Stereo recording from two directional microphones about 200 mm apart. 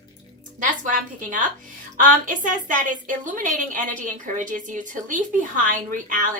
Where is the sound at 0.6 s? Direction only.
40° right (ahead or behind).